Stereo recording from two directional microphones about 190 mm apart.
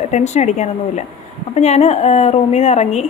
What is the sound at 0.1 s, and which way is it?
A woman's voice, 35° left (ahead or behind).